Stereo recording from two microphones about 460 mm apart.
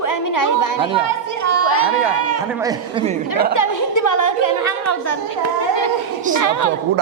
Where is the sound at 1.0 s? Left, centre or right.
Right.